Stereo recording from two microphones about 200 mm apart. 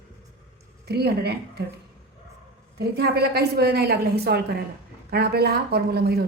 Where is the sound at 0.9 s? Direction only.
55° right (ahead or behind).